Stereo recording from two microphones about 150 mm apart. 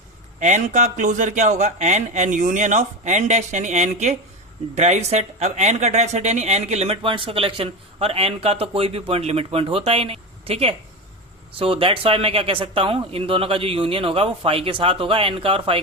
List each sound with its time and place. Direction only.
0.3 s a man's voice: 50° right (ahead or behind); by 15.8 s 35° right (ahead or behind)